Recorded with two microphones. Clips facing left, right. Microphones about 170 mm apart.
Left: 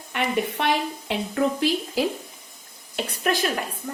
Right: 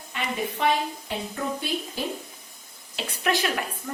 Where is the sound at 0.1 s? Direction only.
70° left (ahead or behind); by 2.0 s 85° left.